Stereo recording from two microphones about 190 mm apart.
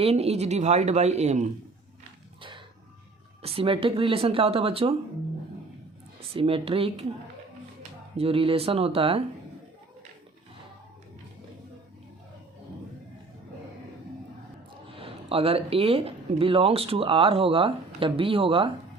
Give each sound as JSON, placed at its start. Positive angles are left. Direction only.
{"t": 0.0, "sound": "speech", "side_deg": -35}
{"t": 2.4, "sound": "a sound", "side_deg": -25}
{"t": 3.4, "sound": "speech", "side_deg": -30}
{"t": 6.3, "sound": "speech", "side_deg": -30}
{"t": 8.1, "sound": "speech", "side_deg": -30}
{"t": 14.9, "sound": "speech", "side_deg": -30}